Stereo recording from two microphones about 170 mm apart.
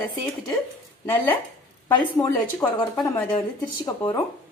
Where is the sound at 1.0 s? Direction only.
10° left (ahead or behind).